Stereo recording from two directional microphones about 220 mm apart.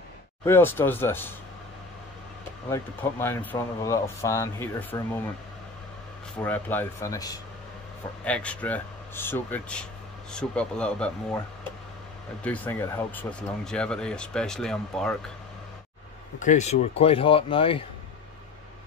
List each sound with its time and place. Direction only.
0.5 s speech: 10° left (ahead or behind)
2.7 s speech: 10° left (ahead or behind)
6.4 s speech: 10° left (ahead or behind)
12.4 s speech: 5° left (ahead or behind)
16.3 s speech: 35° left (ahead or behind)